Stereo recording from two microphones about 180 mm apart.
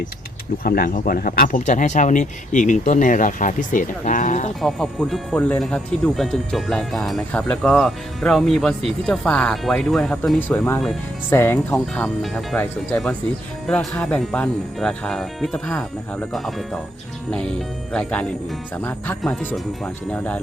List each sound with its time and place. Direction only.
0.6 s speech: 55° left (ahead or behind)
4.6 s speech: centre (ahead or behind)
17.9 s speech: 5° left (ahead or behind)